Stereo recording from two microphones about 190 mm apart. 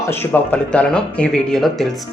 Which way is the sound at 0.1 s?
10° left (ahead or behind).